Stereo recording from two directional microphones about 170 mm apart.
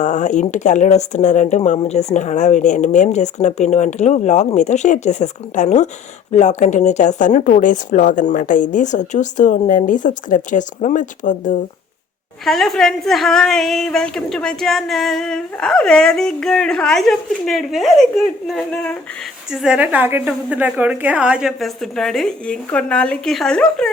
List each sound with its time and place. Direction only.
0.0 s speech: 45° left (ahead or behind)
12.5 s a woman's voice: centre (ahead or behind)